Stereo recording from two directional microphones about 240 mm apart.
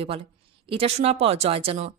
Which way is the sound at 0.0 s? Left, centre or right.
Right.